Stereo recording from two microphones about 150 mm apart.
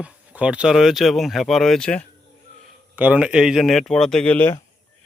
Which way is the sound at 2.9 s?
10° right (ahead or behind).